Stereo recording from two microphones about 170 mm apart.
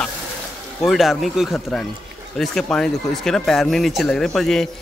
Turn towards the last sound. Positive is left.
turn(degrees=0)  # may be behind; listen again after turning